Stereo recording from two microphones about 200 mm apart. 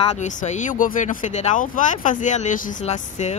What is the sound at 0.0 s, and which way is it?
Speech, 35° left (ahead or behind).